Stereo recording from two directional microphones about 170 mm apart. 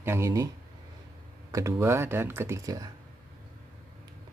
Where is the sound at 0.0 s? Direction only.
15° right (ahead or behind).